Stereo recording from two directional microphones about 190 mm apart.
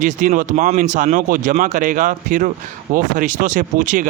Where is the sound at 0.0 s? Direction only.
40° right (ahead or behind).